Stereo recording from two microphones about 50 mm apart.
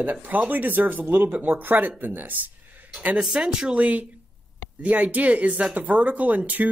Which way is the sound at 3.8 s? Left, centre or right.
Right.